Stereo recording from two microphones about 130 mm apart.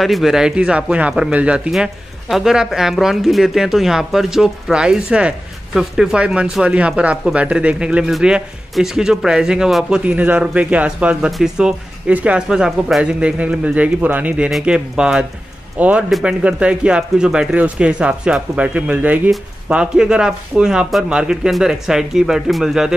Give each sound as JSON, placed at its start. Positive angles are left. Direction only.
{"t": 0.0, "sound": "speech", "side_deg": 0}